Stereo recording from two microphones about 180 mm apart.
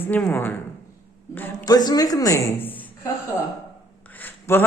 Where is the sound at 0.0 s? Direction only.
5° left (ahead or behind).